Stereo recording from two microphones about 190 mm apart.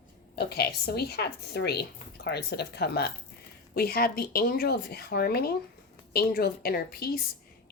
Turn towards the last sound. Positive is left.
turn(degrees=55)  # may be behind; listen again after turning